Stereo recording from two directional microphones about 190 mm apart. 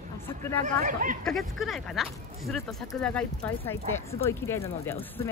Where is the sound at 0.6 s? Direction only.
45° right (ahead or behind).